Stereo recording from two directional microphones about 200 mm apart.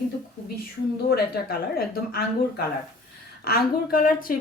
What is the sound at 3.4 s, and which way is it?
Speech, 45° left (ahead or behind).